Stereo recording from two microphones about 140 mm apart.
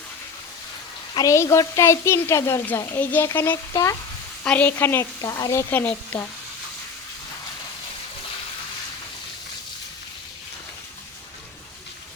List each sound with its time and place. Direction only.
1.1 s a woman's voice: 25° left (ahead or behind)
4.4 s speech: 10° left (ahead or behind)